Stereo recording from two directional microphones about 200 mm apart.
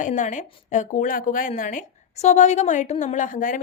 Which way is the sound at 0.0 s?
40° left (ahead or behind).